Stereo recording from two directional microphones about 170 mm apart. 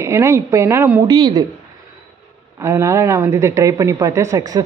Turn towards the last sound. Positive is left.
turn(degrees=-20)  # may be behind; listen again after turning